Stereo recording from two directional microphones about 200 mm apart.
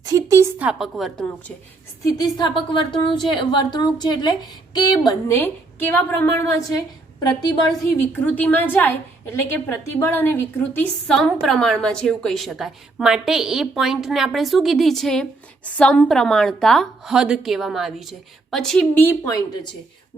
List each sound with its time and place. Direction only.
0.0 s a woman's voice: 15° right (ahead or behind); by 1.5 s 5° left (ahead or behind)
2.1 s a woman's voice: 20° left (ahead or behind)
7.7 s a woman's voice: 10° left (ahead or behind)